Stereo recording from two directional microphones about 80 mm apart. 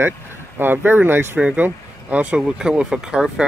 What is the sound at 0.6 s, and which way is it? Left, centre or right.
Speech, right.